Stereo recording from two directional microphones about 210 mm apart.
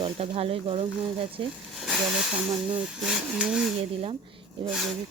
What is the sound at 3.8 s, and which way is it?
Speech, 30° right (ahead or behind).